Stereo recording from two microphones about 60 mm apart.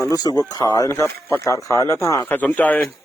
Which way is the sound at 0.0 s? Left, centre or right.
Left.